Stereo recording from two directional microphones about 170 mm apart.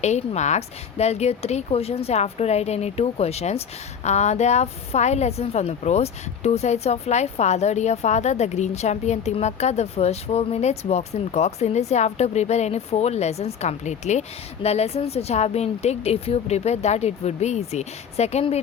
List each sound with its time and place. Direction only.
0.0 s a woman's voice: 40° left (ahead or behind)